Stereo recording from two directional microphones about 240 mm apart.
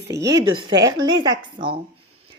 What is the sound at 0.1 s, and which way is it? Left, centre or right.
A woman's voice, centre.